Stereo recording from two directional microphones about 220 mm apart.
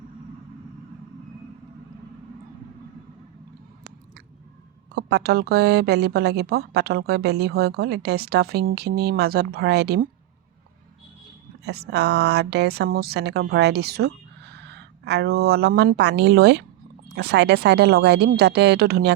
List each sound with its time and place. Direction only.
4.9 s a woman's voice: 50° right (ahead or behind)
11.6 s a woman's voice: 50° right (ahead or behind)